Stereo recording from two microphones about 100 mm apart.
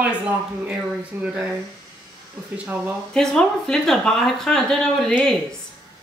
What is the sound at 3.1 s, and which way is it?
Speech, 5° left (ahead or behind).